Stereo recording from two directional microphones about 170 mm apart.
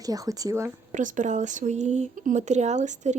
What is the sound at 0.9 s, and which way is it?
Speech, 50° right (ahead or behind).